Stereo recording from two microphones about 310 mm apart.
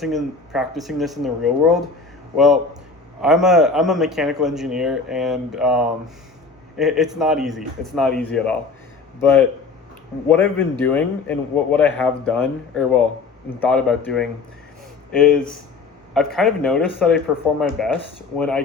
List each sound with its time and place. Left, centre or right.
0.0 s a man's voice: centre
16.1 s a man's voice: centre